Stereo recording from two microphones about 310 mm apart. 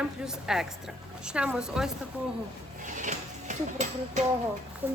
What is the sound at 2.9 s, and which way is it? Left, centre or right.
Speech, right.